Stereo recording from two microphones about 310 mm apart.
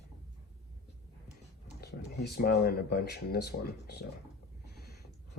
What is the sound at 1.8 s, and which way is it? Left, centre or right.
Speech, left.